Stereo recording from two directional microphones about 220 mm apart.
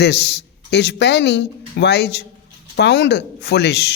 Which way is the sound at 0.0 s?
50° left (ahead or behind).